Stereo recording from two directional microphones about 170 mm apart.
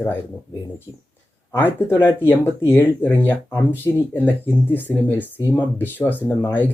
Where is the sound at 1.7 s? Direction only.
15° left (ahead or behind).